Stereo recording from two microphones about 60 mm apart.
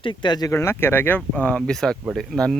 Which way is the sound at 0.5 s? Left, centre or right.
Left.